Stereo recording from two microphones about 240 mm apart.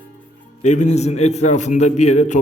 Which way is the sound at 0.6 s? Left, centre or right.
Left.